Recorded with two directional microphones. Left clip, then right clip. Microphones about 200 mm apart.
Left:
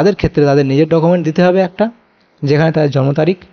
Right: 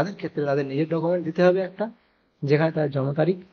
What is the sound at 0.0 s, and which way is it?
A man's voice, 45° left (ahead or behind).